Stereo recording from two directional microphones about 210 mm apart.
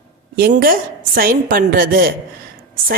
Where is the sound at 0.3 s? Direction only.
45° right (ahead or behind).